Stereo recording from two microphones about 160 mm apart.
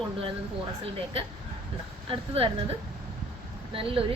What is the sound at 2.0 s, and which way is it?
Speech, 35° right (ahead or behind).